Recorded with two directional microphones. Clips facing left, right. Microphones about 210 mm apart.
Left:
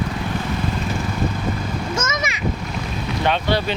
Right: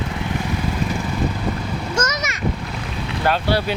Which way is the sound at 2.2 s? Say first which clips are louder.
Left 2 dB; centre (ahead or behind).